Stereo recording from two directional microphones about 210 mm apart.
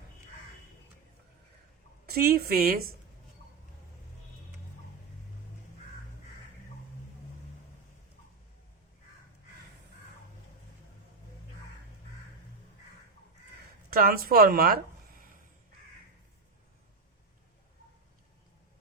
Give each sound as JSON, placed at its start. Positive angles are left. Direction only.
{"t": 2.0, "sound": "speech", "side_deg": -45}
{"t": 13.9, "sound": "speech", "side_deg": -45}